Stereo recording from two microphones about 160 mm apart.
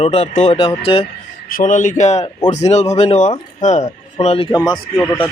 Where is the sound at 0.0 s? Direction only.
40° left (ahead or behind).